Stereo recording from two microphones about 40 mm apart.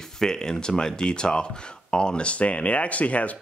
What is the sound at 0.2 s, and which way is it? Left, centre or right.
Speech, centre.